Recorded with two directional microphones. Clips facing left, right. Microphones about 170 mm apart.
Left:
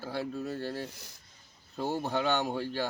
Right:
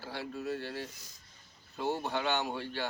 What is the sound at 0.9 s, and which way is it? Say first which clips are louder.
Speech: left 4 dB; 65° left (ahead or behind).